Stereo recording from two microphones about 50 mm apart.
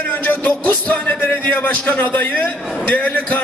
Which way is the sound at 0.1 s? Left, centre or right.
Left.